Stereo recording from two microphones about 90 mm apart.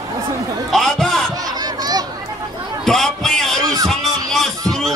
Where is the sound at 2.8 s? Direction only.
5° left (ahead or behind).